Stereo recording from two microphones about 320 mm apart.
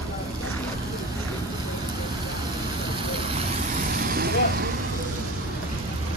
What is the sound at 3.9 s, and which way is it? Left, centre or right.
Vehicle, right.